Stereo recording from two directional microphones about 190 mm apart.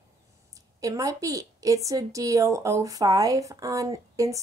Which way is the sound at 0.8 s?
15° right (ahead or behind).